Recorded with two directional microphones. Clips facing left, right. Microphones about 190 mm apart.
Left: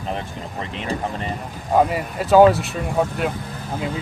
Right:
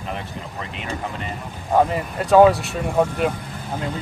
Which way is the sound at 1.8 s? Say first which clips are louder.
Even; 5° left (ahead or behind).